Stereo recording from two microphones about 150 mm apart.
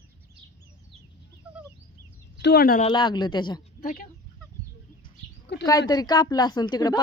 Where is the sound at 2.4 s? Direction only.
85° left.